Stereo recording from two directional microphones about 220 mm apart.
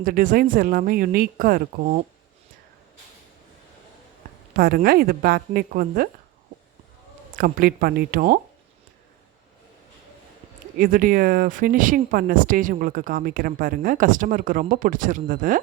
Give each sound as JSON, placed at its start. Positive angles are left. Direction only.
{"t": 0.0, "sound": "speech", "side_deg": -40}
{"t": 4.5, "sound": "speech", "side_deg": -40}
{"t": 7.3, "sound": "speech", "side_deg": -40}
{"t": 10.8, "sound": "speech", "side_deg": -40}